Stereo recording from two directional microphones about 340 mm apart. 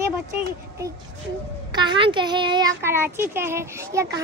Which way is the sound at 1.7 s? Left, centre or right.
Centre.